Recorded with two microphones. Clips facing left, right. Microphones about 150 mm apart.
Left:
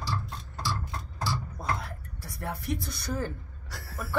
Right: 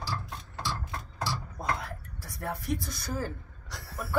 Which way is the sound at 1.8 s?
Centre (ahead or behind).